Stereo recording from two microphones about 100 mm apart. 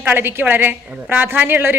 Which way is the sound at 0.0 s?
20° right (ahead or behind).